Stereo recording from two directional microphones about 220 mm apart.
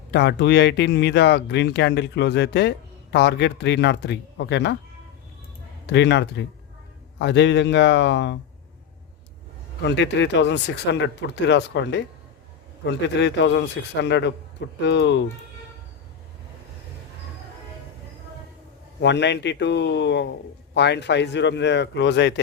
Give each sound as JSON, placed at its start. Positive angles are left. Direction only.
{"t": 0.1, "sound": "speech", "side_deg": 50}
{"t": 5.8, "sound": "speech", "side_deg": 55}
{"t": 9.8, "sound": "speech", "side_deg": 55}
{"t": 18.9, "sound": "speech", "side_deg": 50}